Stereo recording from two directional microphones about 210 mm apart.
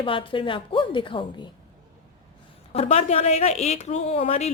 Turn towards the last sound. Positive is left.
turn(degrees=30)  # may be behind; listen again after turning